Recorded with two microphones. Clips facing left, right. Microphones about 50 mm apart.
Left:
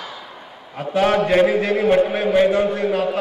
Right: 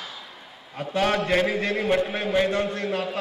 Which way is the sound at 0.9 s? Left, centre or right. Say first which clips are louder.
Left 6 dB; centre.